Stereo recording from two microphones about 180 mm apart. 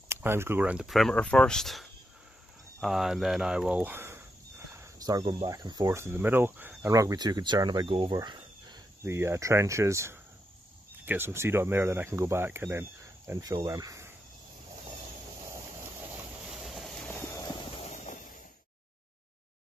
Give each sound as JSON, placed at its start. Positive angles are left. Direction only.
{"t": 0.1, "sound": "speech", "side_deg": -15}
{"t": 16.4, "sound": "vehicle", "side_deg": 0}
{"t": 17.1, "sound": "clip-clop", "side_deg": 15}
{"t": 17.7, "sound": "a sound", "side_deg": 40}